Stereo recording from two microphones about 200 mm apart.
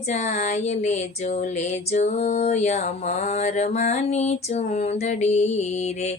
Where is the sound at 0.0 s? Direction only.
35° left (ahead or behind).